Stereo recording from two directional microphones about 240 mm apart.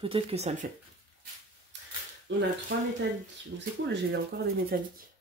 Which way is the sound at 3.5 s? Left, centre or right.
Right.